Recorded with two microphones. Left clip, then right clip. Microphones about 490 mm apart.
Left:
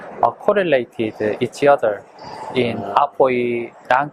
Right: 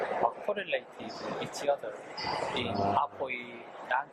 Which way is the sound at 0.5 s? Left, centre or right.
Left.